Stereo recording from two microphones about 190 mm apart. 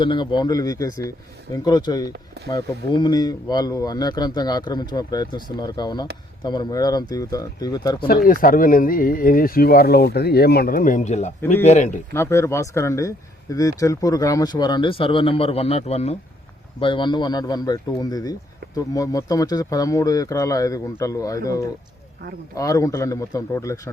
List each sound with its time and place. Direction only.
0.0 s speech: 25° left (ahead or behind)
2.1 s speech: 60° right (ahead or behind)
2.5 s speech: 20° left (ahead or behind)
7.9 s speech: 55° left (ahead or behind)
12.1 s speech: 15° left (ahead or behind)